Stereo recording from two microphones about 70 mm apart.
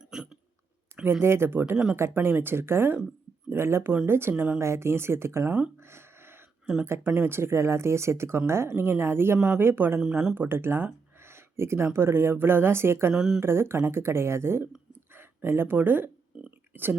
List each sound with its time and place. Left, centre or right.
0.1 s hiccup: centre
1.2 s speech: right
1.7 s speech: centre
2.0 s speech: right
5.8 s a sound: right
6.8 s speech: right
10.0 s speech: centre
10.3 s speech: right
13.1 s speech: centre
13.4 s speech: right